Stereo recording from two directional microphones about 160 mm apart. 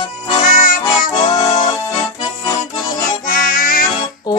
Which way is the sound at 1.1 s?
30° left (ahead or behind).